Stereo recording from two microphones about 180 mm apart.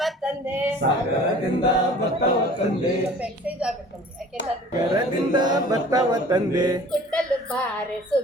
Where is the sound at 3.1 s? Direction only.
5° right (ahead or behind).